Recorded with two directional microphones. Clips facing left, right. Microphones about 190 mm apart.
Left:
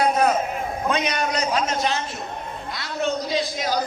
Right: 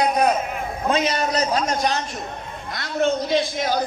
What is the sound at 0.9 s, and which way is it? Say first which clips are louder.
Speech: right 4 dB; 30° right (ahead or behind).